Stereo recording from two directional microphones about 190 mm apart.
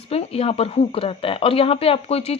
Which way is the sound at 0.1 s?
30° left (ahead or behind).